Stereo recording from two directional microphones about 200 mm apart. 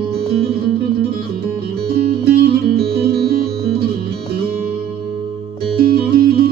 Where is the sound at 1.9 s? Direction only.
50° right (ahead or behind).